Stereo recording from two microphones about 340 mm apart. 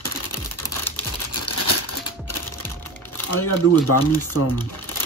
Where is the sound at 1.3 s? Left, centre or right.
Left.